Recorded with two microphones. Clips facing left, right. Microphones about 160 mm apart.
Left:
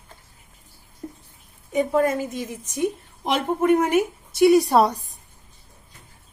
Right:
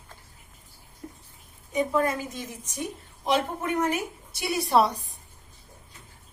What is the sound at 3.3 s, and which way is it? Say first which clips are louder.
A woman's voice: left 6 dB; 60° left (ahead or behind).